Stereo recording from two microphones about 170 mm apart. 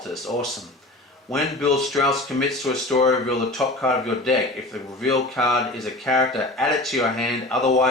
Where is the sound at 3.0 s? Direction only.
Centre (ahead or behind).